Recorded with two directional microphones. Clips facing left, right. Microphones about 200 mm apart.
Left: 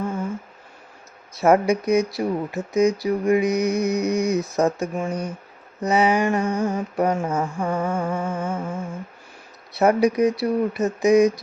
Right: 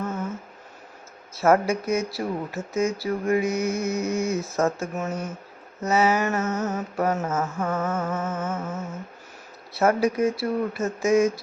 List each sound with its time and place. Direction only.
1.4 s mantra: 15° left (ahead or behind)